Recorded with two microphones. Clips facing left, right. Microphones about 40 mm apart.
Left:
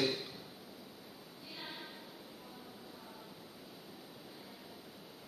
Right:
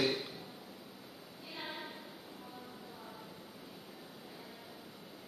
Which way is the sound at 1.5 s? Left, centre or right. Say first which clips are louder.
Right 4 dB; centre.